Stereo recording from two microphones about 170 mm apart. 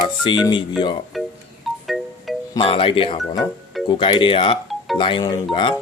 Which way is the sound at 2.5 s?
35° left (ahead or behind).